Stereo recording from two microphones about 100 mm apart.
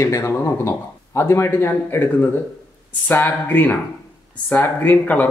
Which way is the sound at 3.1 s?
20° left (ahead or behind).